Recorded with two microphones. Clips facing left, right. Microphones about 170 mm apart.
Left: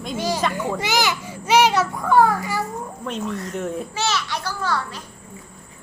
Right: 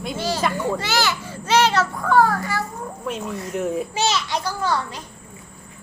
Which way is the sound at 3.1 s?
5° right (ahead or behind).